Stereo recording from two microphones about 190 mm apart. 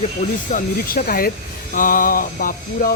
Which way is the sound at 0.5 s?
50° left (ahead or behind).